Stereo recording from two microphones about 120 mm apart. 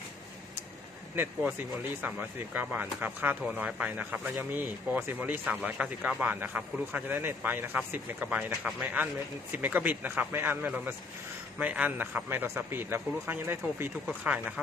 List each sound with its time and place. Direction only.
1.1 s speech: 15° right (ahead or behind)